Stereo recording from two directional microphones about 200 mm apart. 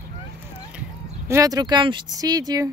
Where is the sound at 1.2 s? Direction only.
15° right (ahead or behind).